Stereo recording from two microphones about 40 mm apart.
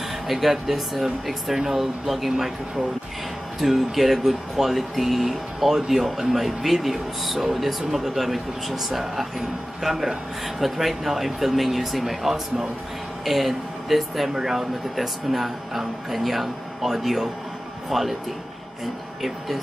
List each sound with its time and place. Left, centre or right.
0.3 s speech: centre
3.6 s a man's voice: centre